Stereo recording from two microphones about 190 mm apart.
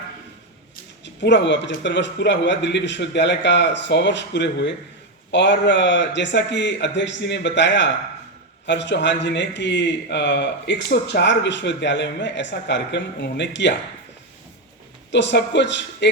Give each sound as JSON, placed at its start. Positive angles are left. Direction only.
{"t": 1.0, "sound": "a man's voice", "side_deg": 70}
{"t": 15.1, "sound": "a man's voice", "side_deg": 65}